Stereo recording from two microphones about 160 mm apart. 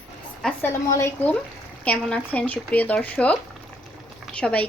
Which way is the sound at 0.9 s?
15° left (ahead or behind).